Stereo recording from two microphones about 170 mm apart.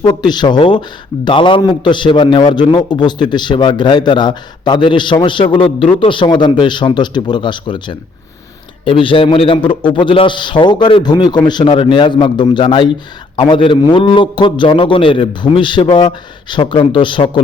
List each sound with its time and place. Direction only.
0.0 s a man's voice: 25° left (ahead or behind)